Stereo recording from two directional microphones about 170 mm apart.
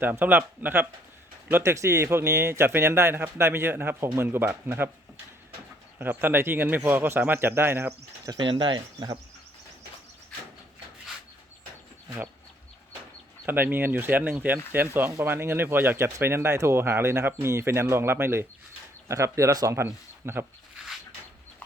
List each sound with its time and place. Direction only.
0.0 s speech: 10° right (ahead or behind)
6.0 s speech: 10° right (ahead or behind)
13.4 s speech: 10° right (ahead or behind)